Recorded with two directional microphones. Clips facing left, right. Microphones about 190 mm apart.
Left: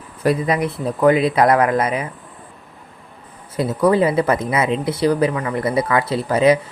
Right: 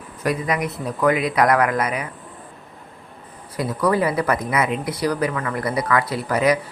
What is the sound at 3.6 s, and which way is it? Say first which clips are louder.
Speech: left 4 dB; 25° left (ahead or behind).